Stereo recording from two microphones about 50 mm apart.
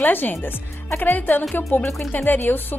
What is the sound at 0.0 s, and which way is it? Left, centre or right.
Speech, left.